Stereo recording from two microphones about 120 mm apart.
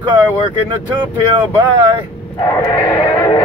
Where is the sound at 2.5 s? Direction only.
30° left (ahead or behind).